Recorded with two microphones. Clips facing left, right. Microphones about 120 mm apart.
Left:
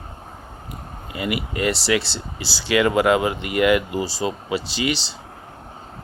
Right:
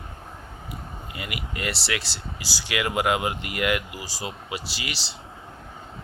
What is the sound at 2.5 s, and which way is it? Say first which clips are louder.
Speech: left 6 dB; 15° right (ahead or behind).